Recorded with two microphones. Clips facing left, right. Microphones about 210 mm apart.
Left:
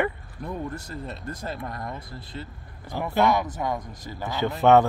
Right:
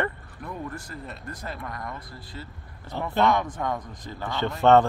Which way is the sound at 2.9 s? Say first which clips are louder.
Left 1 dB; 10° left (ahead or behind).